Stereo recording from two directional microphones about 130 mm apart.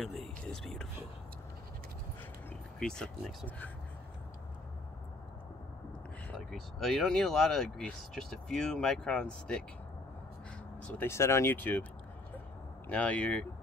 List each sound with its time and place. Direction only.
0.0 s speech: 5° left (ahead or behind)
2.8 s speech: 5° left (ahead or behind)
6.3 s speech: centre (ahead or behind)
11.0 s speech: 20° left (ahead or behind)
12.8 s speech: 10° left (ahead or behind)